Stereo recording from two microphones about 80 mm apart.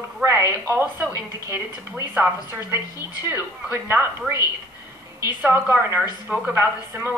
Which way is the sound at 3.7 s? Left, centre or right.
Right.